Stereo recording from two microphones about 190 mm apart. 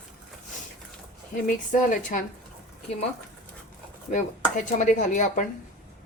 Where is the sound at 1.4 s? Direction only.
45° left (ahead or behind).